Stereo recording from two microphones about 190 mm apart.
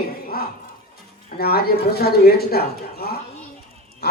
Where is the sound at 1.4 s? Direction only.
55° left (ahead or behind).